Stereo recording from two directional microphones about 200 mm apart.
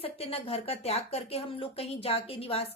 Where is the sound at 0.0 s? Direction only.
30° left (ahead or behind).